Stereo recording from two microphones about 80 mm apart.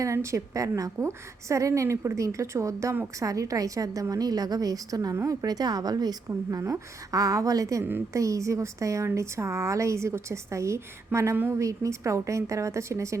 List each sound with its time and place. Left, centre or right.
0.0 s a woman's voice: right
6.2 s a woman's voice: right